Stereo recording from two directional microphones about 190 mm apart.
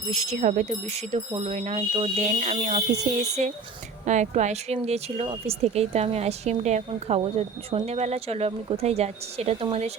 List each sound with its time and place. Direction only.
0.1 s speech: 35° right (ahead or behind)